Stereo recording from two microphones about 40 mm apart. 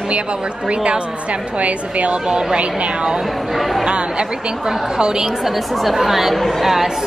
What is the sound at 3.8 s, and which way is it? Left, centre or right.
A woman's voice, right.